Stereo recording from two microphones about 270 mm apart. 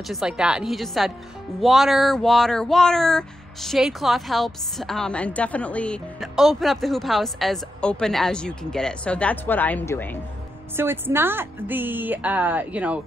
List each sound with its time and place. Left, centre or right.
0.1 s speech: centre
10.8 s a woman's voice: centre